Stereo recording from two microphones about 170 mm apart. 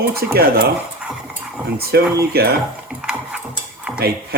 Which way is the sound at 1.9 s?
75° right (ahead or behind).